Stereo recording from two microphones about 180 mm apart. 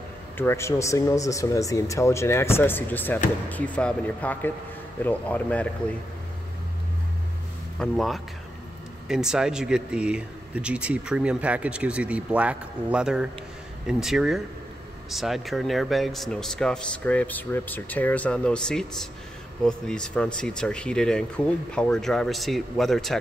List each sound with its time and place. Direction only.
0.4 s speech: 15° left (ahead or behind)
7.8 s speech: centre (ahead or behind)